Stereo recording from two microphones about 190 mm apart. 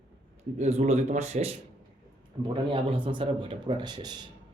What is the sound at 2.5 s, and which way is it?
Speech, 30° right (ahead or behind).